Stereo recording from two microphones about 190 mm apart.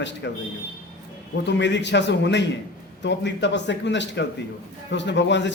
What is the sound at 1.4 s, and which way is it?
A man's voice, 65° left (ahead or behind).